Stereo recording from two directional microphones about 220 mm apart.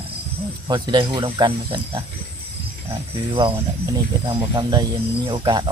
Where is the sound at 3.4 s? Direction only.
20° right (ahead or behind).